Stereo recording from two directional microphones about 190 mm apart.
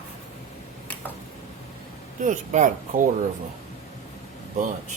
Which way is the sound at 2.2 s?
40° right (ahead or behind).